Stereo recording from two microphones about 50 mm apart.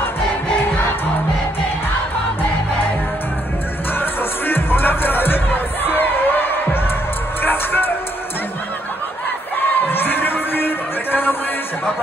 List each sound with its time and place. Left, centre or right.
3.9 s music: left
9.8 s music: left